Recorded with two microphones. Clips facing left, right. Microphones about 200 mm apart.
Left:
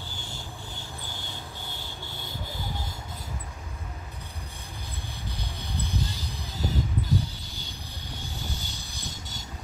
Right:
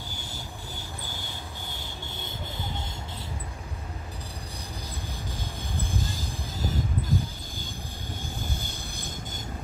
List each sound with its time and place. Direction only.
6.6 s vehicle: 50° right (ahead or behind)